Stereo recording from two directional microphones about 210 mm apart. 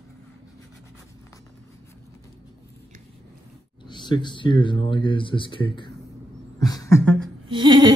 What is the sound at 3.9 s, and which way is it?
Speech, 20° left (ahead or behind).